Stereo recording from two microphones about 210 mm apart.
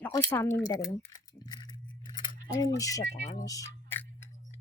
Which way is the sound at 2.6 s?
15° left (ahead or behind).